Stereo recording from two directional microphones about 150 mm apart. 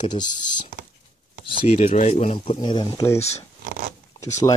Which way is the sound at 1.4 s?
40° left (ahead or behind).